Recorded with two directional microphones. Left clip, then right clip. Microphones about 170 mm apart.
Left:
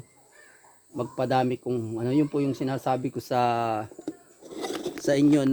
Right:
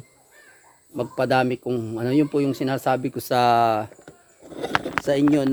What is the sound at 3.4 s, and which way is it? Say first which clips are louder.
Speech: right 9 dB; 80° right.